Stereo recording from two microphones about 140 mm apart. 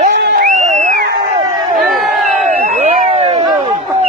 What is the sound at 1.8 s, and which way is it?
Crowd, centre (ahead or behind).